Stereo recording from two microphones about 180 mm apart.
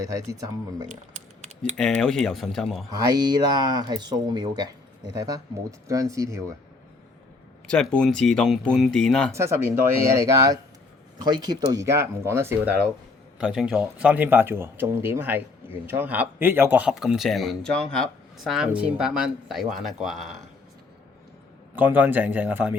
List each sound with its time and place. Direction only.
0.0 s speech: 20° right (ahead or behind)
0.9 s a sound: 40° right (ahead or behind)
1.7 s speech: 5° left (ahead or behind)
3.0 s speech: 25° right (ahead or behind)
7.7 s speech: 5° left (ahead or behind)
9.3 s speech: 15° right (ahead or behind)
21.8 s speech: 10° right (ahead or behind)